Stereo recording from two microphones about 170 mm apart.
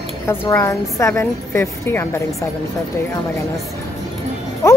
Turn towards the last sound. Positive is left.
turn(degrees=15)  # may be behind; listen again after turning